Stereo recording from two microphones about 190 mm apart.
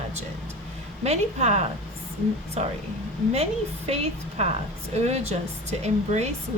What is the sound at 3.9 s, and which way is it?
A woman's voice, 30° right (ahead or behind).